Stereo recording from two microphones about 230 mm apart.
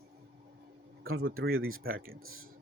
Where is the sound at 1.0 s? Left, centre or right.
Right.